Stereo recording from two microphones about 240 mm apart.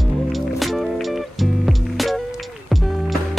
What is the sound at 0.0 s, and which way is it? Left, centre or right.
Music, centre.